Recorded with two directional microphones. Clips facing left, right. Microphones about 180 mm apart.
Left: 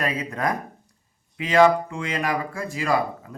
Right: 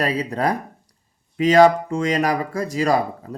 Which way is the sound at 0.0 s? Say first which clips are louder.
Right 4 dB; 35° right (ahead or behind).